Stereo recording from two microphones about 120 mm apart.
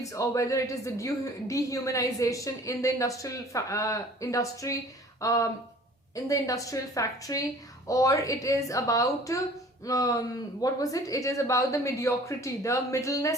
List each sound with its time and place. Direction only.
0.0 s a woman's voice: 25° left (ahead or behind)